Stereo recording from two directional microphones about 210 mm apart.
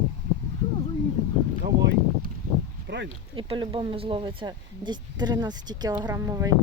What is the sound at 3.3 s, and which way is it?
Speech, 25° right (ahead or behind).